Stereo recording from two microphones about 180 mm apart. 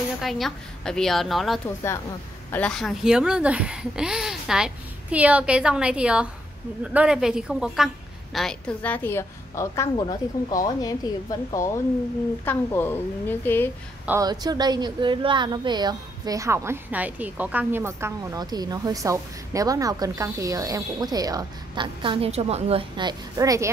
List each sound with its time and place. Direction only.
0.2 s a woman's voice: centre (ahead or behind)
14.2 s a woman's voice: 20° right (ahead or behind)